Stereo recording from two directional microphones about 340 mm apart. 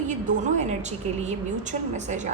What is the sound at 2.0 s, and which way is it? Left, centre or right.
Speech, right.